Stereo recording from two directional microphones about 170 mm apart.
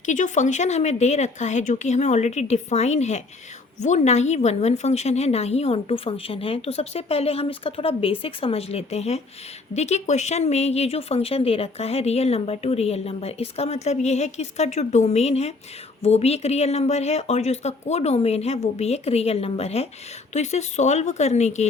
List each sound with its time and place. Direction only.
0.0 s speech: 45° left (ahead or behind)